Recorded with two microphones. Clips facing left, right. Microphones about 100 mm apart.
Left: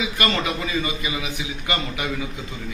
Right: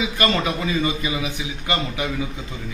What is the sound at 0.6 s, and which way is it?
A man's voice, 30° right (ahead or behind).